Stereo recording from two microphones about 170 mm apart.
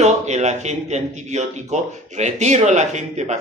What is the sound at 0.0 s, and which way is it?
Speech, 40° right (ahead or behind).